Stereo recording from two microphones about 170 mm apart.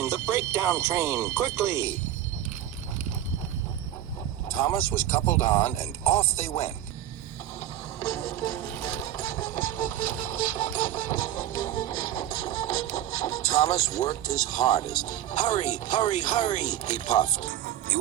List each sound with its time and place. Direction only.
0.0 s speech: 15° right (ahead or behind)
4.6 s speech: 15° left (ahead or behind)
5.5 s speech: 25° left (ahead or behind)
7.9 s music: 20° left (ahead or behind)
9.4 s printer: 50° left (ahead or behind)
11.7 s speech: 30° left (ahead or behind)
14.8 s printer: 45° left (ahead or behind)
16.2 s speech: 25° left (ahead or behind)
16.5 s printer: 45° left (ahead or behind)
17.5 s music: 65° right (ahead or behind)